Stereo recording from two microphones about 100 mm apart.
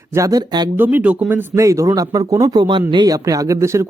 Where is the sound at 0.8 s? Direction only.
20° right (ahead or behind).